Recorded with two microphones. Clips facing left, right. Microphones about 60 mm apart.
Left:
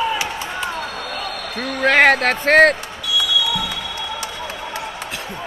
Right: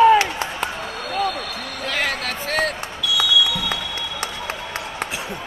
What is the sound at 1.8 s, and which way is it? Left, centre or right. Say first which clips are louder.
Speech: left 11 dB; left.